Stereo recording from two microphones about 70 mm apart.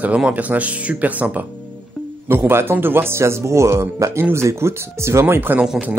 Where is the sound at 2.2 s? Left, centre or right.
Right.